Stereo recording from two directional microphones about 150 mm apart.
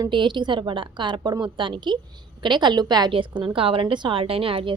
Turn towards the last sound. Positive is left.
turn(degrees=-35)  # may be behind; listen again after turning